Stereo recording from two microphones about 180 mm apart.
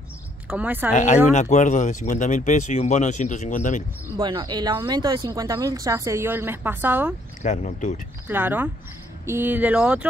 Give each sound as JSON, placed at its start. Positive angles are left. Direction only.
{"t": 0.5, "sound": "speech", "side_deg": -10}
{"t": 0.9, "sound": "speech", "side_deg": 40}
{"t": 4.2, "sound": "speech", "side_deg": -25}
{"t": 7.4, "sound": "speech", "side_deg": 40}
{"t": 8.3, "sound": "speech", "side_deg": -10}